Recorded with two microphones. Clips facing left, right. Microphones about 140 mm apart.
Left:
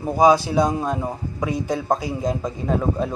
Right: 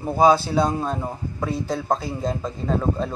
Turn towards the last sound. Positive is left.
turn(degrees=10)  # may be behind; listen again after turning